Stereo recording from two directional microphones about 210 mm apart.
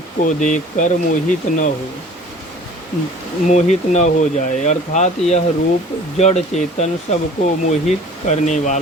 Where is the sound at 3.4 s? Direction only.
35° left (ahead or behind).